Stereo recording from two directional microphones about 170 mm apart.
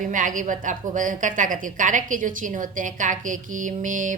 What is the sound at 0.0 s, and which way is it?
A woman's voice, 50° right (ahead or behind).